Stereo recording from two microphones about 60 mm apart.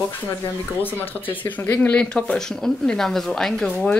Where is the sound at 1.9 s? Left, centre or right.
Centre.